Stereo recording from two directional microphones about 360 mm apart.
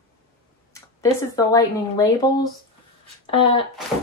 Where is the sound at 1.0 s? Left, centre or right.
Centre.